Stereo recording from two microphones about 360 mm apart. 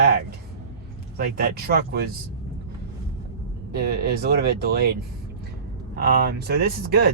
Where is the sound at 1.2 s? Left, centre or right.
Right.